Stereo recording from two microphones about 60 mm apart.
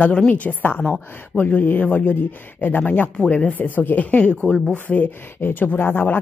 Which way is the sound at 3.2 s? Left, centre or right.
Left.